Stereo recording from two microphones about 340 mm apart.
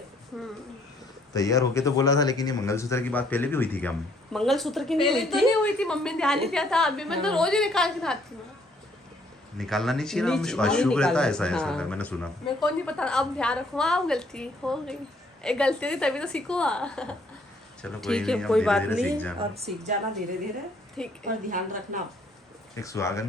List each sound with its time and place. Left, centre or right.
0.3 s a man's voice: centre
9.6 s a man's voice: centre
21.0 s a man's voice: centre
21.5 s speech: right
22.7 s speech: centre